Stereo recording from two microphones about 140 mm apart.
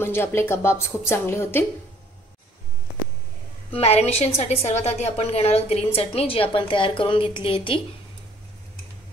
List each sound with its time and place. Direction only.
0.0 s a woman's voice: 15° left (ahead or behind)
3.7 s a woman's voice: 50° left (ahead or behind)